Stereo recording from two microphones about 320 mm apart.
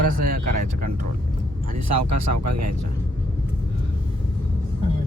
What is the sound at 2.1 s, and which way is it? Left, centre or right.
Speech, right.